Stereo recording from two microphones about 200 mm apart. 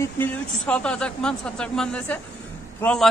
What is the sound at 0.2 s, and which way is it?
A man's voice, 5° left (ahead or behind).